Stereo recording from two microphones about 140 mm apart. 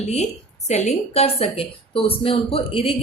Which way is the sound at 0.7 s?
50° left (ahead or behind).